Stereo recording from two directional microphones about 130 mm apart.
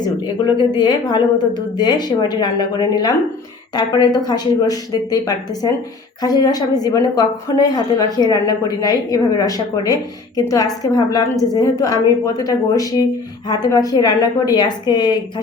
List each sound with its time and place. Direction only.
0.2 s a woman's voice: 35° left (ahead or behind)